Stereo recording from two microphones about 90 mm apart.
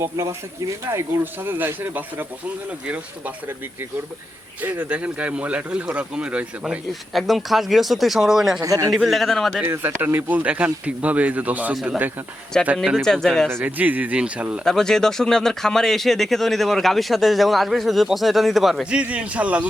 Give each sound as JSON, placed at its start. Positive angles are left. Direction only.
{"t": 0.0, "sound": "speech", "side_deg": -35}
{"t": 4.6, "sound": "speech", "side_deg": -15}
{"t": 7.1, "sound": "speech", "side_deg": 0}
{"t": 8.6, "sound": "speech", "side_deg": -40}
{"t": 8.9, "sound": "speech", "side_deg": 0}
{"t": 9.6, "sound": "speech", "side_deg": -25}
{"t": 12.7, "sound": "speech", "side_deg": 0}
{"t": 13.5, "sound": "speech", "side_deg": -20}
{"t": 14.6, "sound": "speech", "side_deg": 5}